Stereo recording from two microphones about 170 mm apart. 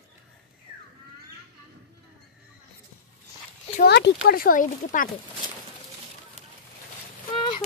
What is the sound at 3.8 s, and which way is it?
Speech, 70° left (ahead or behind).